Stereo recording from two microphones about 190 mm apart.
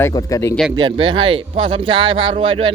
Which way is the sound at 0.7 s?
25° right (ahead or behind).